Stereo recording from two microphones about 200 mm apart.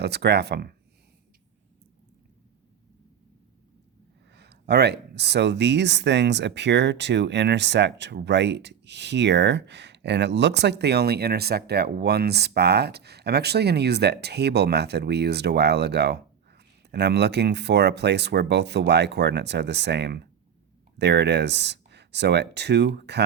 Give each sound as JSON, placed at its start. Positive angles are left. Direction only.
{"t": 0.0, "sound": "speech", "side_deg": -55}
{"t": 4.3, "sound": "speech", "side_deg": -55}